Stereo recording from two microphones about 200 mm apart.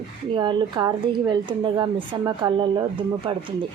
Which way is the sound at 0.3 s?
20° right (ahead or behind).